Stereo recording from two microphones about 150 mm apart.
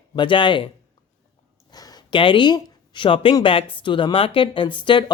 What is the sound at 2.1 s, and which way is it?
Speech, 35° left (ahead or behind).